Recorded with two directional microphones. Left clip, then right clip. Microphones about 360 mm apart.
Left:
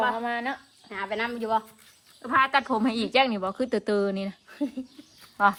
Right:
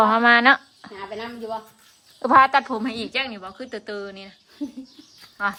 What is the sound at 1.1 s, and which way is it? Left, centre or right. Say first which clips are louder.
Speech: left 4 dB; left.